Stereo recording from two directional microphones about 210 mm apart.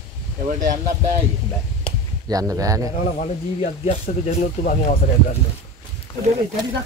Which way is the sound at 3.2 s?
35° left (ahead or behind).